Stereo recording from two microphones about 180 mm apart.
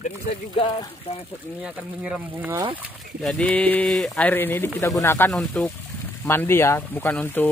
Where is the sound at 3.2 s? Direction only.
5° left (ahead or behind).